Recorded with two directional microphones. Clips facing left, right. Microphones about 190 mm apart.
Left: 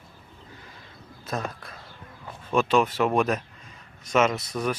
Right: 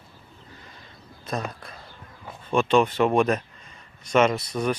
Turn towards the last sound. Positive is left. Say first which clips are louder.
# right 2 dB
turn(degrees=0)  # may be behind; listen again after turning